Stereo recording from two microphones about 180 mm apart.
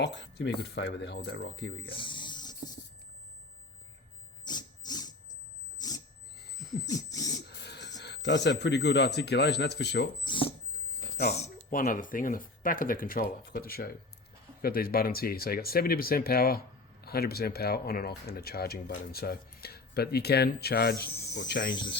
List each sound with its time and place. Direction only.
0.0 s speech: 80° left
1.9 s speech: 30° left (ahead or behind)
4.4 s a sound: 25° left (ahead or behind)
6.8 s dog: 20° left (ahead or behind)
7.4 s speech: 70° left (ahead or behind)
10.2 s speech: 30° left (ahead or behind)
11.3 s speech: 40° left (ahead or behind); by 21.7 s 70° left (ahead or behind)